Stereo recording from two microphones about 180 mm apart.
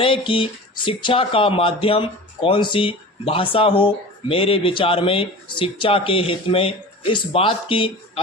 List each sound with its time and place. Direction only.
0.0 s speech: 30° left (ahead or behind)